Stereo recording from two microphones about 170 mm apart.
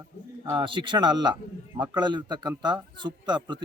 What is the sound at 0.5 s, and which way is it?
A man's voice, 30° right (ahead or behind).